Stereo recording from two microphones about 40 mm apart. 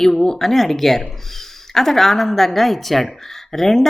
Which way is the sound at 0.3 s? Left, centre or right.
Centre.